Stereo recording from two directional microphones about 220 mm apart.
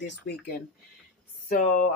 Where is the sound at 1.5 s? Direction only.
35° left (ahead or behind).